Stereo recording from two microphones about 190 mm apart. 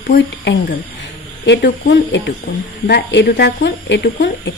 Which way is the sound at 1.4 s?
65° left (ahead or behind).